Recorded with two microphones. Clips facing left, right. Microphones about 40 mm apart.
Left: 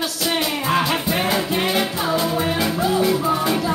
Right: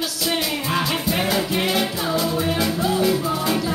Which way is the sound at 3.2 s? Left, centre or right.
Left.